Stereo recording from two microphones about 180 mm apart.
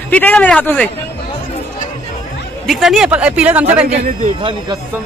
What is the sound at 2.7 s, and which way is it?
Speech, centre (ahead or behind).